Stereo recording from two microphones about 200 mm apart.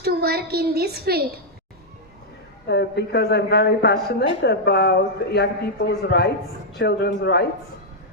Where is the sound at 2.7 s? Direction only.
55° left (ahead or behind).